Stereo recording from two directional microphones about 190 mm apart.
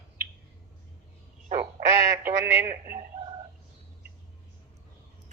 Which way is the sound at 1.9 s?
15° right (ahead or behind).